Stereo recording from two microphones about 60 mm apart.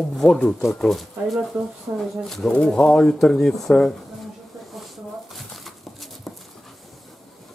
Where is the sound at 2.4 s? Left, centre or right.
Centre.